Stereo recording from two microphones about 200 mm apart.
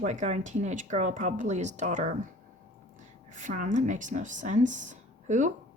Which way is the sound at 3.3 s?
40° right (ahead or behind).